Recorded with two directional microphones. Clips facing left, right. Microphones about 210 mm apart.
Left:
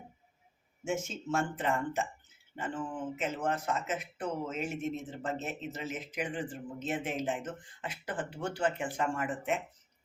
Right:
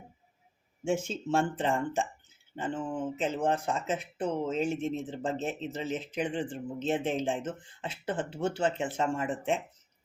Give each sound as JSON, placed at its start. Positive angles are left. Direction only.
{"t": 0.9, "sound": "speech", "side_deg": -30}